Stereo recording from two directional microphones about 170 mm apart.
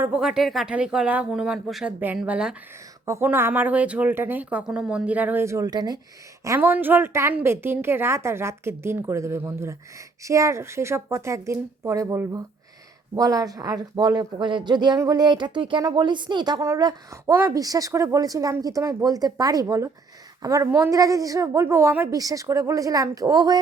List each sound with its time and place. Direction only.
0.0 s a woman's voice: 5° right (ahead or behind); by 23.6 s 20° right (ahead or behind)